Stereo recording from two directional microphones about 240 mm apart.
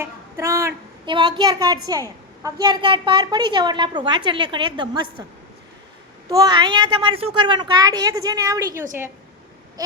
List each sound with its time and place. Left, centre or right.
0.0 s a woman's voice: centre
6.2 s a child's voice: centre